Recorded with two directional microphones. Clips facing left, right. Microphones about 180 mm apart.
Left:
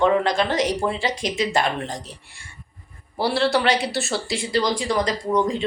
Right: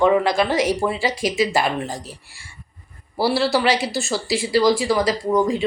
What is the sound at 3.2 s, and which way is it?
A woman's voice, 5° right (ahead or behind).